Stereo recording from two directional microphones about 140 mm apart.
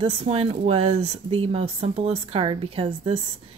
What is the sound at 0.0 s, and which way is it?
Speech, 45° right (ahead or behind).